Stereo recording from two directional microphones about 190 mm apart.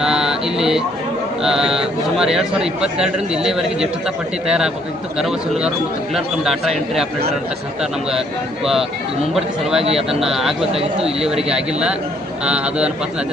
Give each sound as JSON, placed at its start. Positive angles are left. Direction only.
{"t": 0.0, "sound": "a sound", "side_deg": -5}
{"t": 1.4, "sound": "speech", "side_deg": -5}
{"t": 9.3, "sound": "speech", "side_deg": 0}
{"t": 9.8, "sound": "speech", "side_deg": -30}
{"t": 10.2, "sound": "speech", "side_deg": 0}